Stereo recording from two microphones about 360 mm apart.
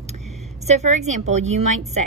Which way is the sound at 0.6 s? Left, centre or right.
Centre.